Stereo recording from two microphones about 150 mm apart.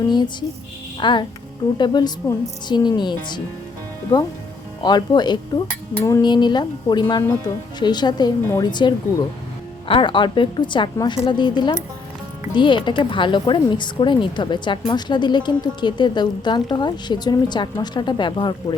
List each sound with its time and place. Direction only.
0.1 s speech: 30° left (ahead or behind)
0.9 s music: 30° left (ahead or behind)
1.8 s speech: 30° left (ahead or behind)
6.0 s cutlery: 15° left (ahead or behind)
6.2 s speech: 30° left (ahead or behind)